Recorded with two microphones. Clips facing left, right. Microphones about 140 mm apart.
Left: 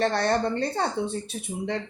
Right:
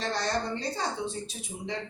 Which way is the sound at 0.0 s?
60° left (ahead or behind).